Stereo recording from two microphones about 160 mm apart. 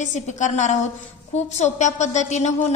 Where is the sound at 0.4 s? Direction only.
50° left (ahead or behind).